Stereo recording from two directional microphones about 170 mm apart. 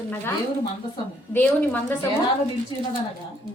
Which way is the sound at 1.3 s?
10° left (ahead or behind).